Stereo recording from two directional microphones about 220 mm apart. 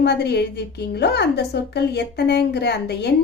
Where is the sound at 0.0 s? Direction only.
50° left (ahead or behind).